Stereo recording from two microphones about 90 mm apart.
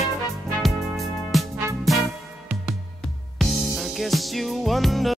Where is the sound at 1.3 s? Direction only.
Centre (ahead or behind).